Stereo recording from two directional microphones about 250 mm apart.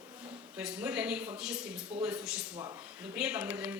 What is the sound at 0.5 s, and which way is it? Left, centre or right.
Speech, centre.